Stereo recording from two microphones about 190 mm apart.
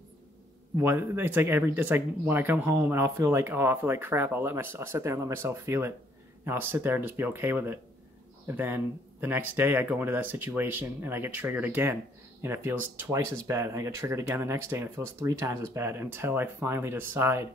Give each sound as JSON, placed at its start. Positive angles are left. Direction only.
{"t": 0.7, "sound": "speech", "side_deg": -10}